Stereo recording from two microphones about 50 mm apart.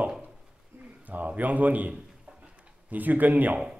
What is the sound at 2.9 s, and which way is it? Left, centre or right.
Speech, right.